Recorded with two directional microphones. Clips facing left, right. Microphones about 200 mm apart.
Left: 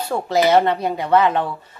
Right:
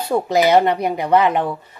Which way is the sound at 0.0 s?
15° right (ahead or behind).